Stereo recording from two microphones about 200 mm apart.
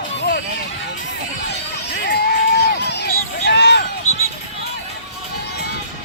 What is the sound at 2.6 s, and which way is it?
Run, 55° left (ahead or behind).